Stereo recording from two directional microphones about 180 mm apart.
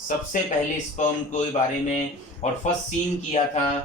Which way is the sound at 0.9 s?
40° left (ahead or behind).